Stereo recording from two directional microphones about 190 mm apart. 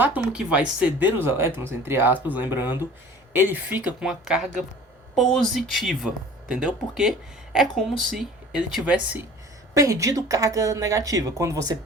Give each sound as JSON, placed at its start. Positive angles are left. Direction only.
{"t": 0.0, "sound": "speech", "side_deg": -5}
{"t": 8.1, "sound": "speech", "side_deg": -5}
{"t": 9.7, "sound": "speech", "side_deg": -15}